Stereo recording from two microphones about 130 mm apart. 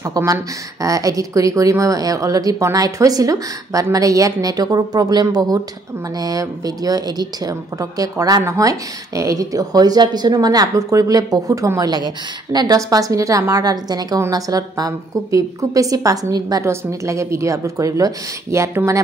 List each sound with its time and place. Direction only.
0.0 s speech: 25° right (ahead or behind)